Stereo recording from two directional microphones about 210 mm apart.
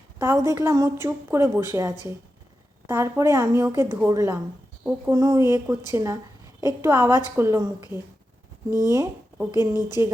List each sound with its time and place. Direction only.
0.2 s a woman's voice: 10° right (ahead or behind)
8.9 s a woman's voice: 15° right (ahead or behind)